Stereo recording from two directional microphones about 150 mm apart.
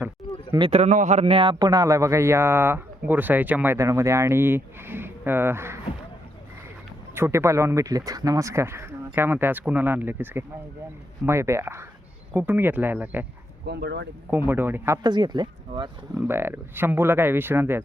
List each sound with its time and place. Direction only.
0.7 s speech: 50° right (ahead or behind); by 5.8 s 15° right (ahead or behind)
7.1 s speech: 15° right (ahead or behind)
13.7 s speech: 90° right
14.3 s speech: 15° right (ahead or behind)
15.0 s speech: 30° right (ahead or behind)
16.1 s speech: 15° right (ahead or behind)